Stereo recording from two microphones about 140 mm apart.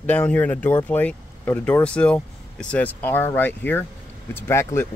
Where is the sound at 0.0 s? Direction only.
10° left (ahead or behind).